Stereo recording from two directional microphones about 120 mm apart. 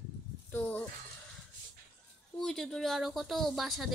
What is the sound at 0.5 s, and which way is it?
Speech, 15° left (ahead or behind).